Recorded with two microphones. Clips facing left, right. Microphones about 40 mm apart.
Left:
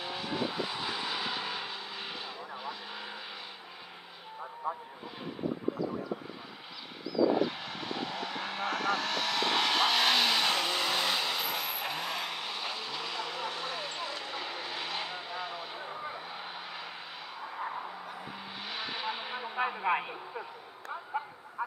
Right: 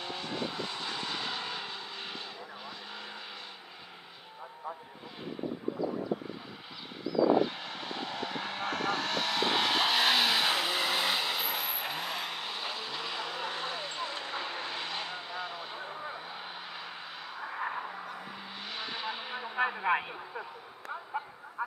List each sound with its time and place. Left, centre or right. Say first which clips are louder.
0.0 s vehicle: left 2 dB; centre
4.7 s vehicle: left 5 dB; centre
7.2 s vehicle: right 4 dB; centre
14.1 s vehicle: right 1 dB; right
14.7 s vehicle: even; centre
17.5 s vehicle: right 2 dB; right
18.0 s a sound: even; centre